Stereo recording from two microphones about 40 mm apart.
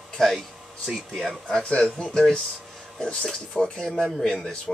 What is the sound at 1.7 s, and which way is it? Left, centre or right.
Speech, left.